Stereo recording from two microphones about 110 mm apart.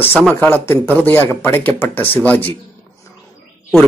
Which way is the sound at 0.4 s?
20° left (ahead or behind).